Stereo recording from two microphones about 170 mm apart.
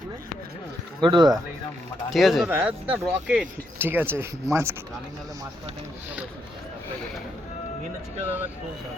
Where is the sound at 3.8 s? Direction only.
10° right (ahead or behind).